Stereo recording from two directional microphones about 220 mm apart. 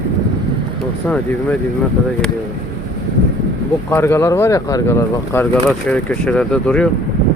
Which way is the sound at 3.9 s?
10° left (ahead or behind).